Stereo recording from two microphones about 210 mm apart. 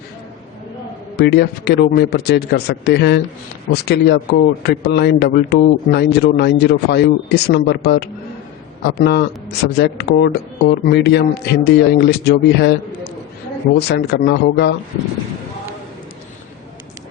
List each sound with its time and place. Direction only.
1.1 s speech: 50° left (ahead or behind)